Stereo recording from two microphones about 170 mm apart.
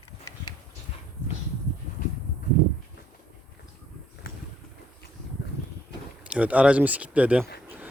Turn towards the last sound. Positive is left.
turn(degrees=-10)  # may be behind; listen again after turning